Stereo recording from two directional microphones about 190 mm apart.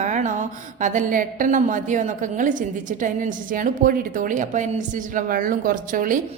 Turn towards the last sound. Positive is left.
turn(degrees=-45)  # may be behind; listen again after turning